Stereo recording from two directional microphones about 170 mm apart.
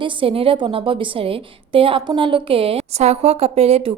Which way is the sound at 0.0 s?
30° right (ahead or behind).